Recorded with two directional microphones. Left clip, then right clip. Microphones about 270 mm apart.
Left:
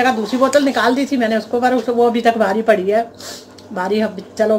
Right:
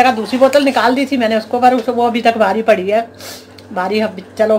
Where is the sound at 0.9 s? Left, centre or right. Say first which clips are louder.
Right 3 dB; centre.